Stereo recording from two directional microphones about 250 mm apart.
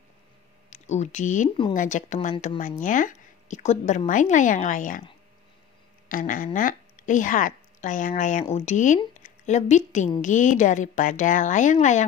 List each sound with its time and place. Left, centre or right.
0.7 s a woman's voice: left
6.0 s a woman's voice: left